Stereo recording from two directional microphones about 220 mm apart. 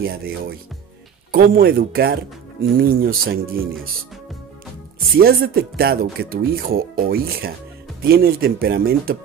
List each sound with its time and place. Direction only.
0.0 s speech: 45° right (ahead or behind)
5.2 s speech: 45° right (ahead or behind)